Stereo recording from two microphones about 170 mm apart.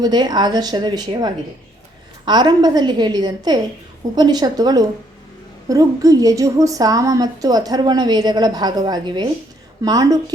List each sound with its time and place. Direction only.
0.0 s a woman's voice: 25° right (ahead or behind)